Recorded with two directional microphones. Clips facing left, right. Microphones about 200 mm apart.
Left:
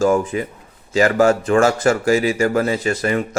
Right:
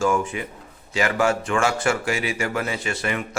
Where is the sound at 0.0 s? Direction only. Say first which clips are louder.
Left 6 dB; 35° left (ahead or behind).